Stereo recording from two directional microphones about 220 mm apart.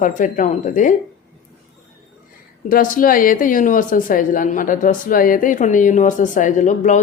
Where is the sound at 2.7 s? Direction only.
40° left (ahead or behind).